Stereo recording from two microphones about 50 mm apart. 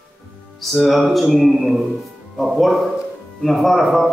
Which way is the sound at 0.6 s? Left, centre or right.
Centre.